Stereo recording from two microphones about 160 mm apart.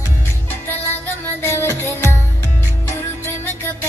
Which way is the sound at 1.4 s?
15° left (ahead or behind).